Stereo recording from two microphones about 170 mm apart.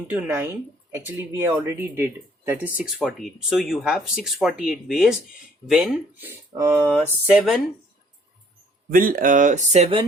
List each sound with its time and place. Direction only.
0.1 s speech: 15° right (ahead or behind)
8.9 s speech: 55° right (ahead or behind); by 10.1 s 35° right (ahead or behind)